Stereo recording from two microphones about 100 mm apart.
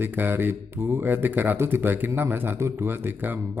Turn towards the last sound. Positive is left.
turn(degrees=-20)  # may be behind; listen again after turning